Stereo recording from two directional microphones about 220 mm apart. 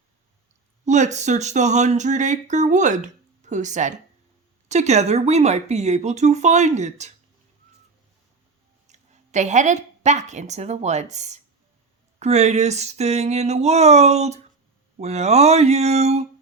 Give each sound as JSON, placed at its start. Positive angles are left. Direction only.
{"t": 0.9, "sound": "speech", "side_deg": -30}
{"t": 8.9, "sound": "a woman's voice", "side_deg": -30}